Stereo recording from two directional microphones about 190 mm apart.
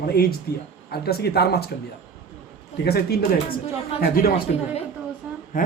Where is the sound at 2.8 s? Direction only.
55° left (ahead or behind).